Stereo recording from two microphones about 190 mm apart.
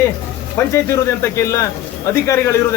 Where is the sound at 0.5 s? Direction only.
15° left (ahead or behind).